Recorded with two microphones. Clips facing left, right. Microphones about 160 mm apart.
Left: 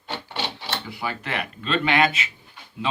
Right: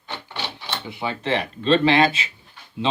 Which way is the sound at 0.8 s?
20° right (ahead or behind).